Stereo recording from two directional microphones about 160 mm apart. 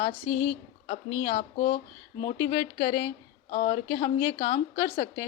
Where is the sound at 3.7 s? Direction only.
30° left (ahead or behind).